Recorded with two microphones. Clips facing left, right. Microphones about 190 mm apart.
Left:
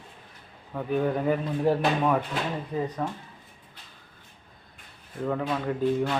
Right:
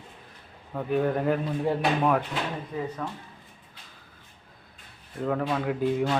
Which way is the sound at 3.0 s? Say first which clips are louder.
Left 3 dB; 25° left (ahead or behind).